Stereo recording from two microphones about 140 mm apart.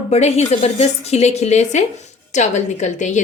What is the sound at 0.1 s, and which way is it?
A woman's voice, 50° left (ahead or behind).